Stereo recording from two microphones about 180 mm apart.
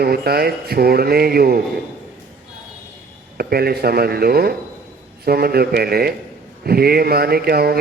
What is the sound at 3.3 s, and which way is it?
A man's voice, 60° right (ahead or behind).